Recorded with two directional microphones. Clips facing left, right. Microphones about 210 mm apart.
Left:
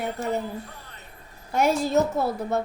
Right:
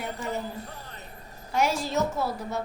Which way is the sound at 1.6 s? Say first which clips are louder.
Left 6 dB; 55° left (ahead or behind).